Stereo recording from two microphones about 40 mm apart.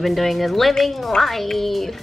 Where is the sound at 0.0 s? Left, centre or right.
Centre.